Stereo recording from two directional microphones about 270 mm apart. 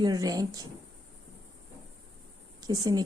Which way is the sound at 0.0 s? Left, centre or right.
Centre.